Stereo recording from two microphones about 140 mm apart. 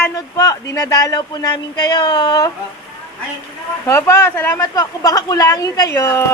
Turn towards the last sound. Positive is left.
turn(degrees=20)  # may be behind; listen again after turning